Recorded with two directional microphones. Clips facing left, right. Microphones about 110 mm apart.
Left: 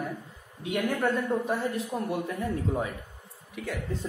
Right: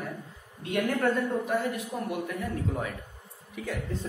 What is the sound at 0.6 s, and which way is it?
Speech, 10° left (ahead or behind).